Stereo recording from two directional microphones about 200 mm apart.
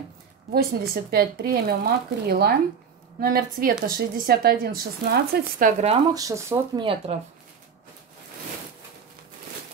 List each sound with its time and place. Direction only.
0.5 s speech: 50° right (ahead or behind)
5.6 s speech: 35° right (ahead or behind)
6.1 s speech: 15° right (ahead or behind)
7.1 s speech: 30° right (ahead or behind)